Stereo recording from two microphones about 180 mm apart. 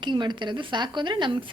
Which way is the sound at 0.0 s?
25° right (ahead or behind).